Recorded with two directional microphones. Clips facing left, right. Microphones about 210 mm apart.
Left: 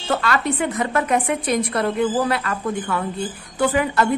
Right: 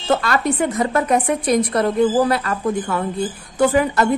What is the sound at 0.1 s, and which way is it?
A woman's voice, 40° right (ahead or behind).